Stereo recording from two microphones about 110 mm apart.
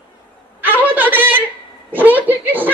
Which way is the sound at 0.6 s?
15° right (ahead or behind).